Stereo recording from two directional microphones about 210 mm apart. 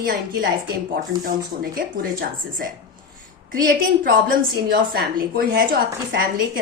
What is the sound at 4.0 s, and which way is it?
A woman's voice, 45° right (ahead or behind).